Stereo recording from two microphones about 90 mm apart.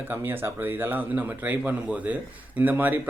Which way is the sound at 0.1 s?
25° right (ahead or behind).